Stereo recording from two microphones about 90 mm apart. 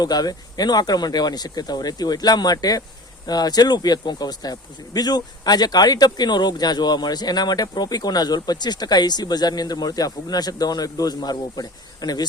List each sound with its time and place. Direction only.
0.0 s speech: 50° left (ahead or behind)